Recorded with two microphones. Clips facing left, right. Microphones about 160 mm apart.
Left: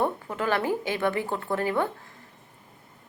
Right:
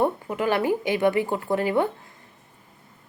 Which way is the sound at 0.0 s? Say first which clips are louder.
Right 4 dB; 15° right (ahead or behind).